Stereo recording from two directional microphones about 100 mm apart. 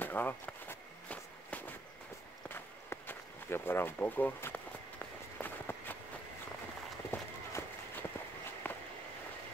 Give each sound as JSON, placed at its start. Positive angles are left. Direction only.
{"t": 0.0, "sound": "walk", "side_deg": 20}
{"t": 7.1, "sound": "run", "side_deg": 20}
{"t": 8.6, "sound": "a sound", "side_deg": 20}